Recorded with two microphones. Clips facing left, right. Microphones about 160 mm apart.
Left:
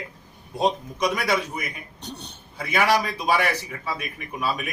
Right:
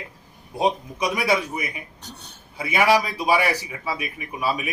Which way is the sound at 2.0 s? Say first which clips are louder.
Left 5 dB; 60° left (ahead or behind).